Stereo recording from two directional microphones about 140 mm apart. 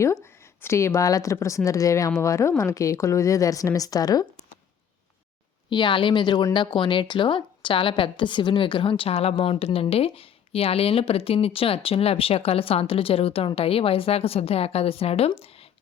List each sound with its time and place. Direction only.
0.6 s speech: 20° left (ahead or behind)
5.7 s speech: 35° left (ahead or behind)